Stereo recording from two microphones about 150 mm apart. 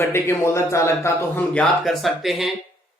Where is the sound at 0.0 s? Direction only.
20° left (ahead or behind).